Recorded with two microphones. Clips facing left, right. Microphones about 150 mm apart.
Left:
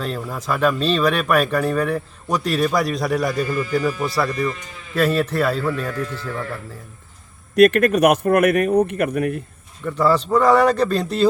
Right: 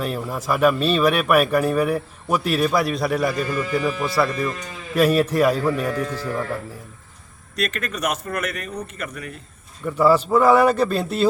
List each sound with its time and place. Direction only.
0.0 s speech: 10° right (ahead or behind)
4.9 s a man's voice: 10° right (ahead or behind)
7.5 s speech: 60° left (ahead or behind)
9.8 s a man's voice: 10° right (ahead or behind)